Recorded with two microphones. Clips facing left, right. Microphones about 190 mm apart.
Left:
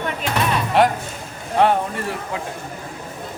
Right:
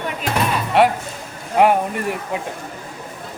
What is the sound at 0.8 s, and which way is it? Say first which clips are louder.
Speech: right 2 dB; centre (ahead or behind).